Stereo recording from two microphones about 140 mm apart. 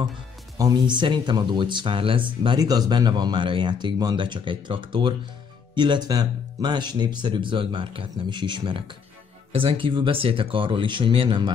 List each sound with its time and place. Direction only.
0.6 s speech: 30° right (ahead or behind)